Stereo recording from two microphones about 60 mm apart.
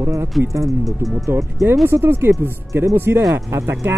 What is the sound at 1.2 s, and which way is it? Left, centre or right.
Speech, right.